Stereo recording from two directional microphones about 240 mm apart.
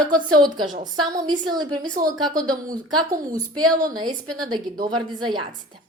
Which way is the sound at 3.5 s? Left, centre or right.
Centre.